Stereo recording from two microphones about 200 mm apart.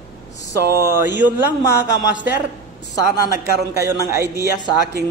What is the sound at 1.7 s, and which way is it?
Speech, 60° left (ahead or behind).